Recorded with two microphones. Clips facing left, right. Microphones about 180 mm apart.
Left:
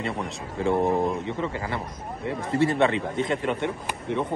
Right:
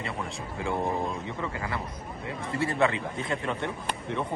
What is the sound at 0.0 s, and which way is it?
Speech, 35° left (ahead or behind).